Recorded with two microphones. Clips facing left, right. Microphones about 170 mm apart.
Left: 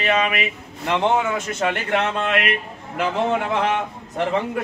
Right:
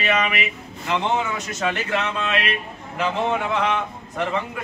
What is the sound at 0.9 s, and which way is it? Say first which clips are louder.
Speech: left 3 dB; 55° left (ahead or behind).